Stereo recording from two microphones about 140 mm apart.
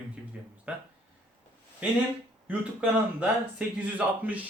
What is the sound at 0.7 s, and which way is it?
Speech, 10° right (ahead or behind).